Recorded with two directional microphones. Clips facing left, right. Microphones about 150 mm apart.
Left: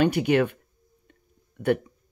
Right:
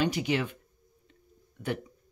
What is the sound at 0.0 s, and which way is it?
Speech, 55° left (ahead or behind).